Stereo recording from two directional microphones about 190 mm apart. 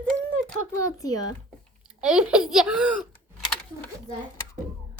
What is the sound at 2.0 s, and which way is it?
Speech, 5° right (ahead or behind).